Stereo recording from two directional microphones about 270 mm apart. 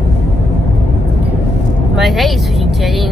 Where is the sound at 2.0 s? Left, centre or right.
Centre.